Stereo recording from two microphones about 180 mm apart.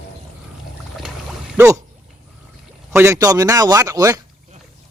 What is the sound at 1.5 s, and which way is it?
Speech, 10° right (ahead or behind).